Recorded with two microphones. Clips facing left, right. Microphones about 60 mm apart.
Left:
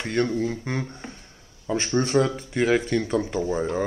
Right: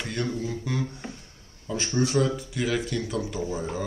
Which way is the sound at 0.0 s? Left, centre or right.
Left.